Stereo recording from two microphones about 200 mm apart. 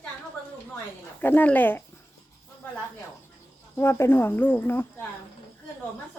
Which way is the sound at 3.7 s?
10° left (ahead or behind).